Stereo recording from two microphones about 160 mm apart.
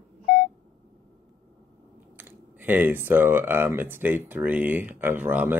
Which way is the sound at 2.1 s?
10° right (ahead or behind).